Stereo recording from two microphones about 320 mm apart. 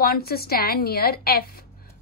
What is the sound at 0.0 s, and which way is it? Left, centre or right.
A woman's voice, left.